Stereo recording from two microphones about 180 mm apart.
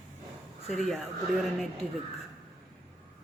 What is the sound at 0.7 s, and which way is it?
Speech, centre (ahead or behind).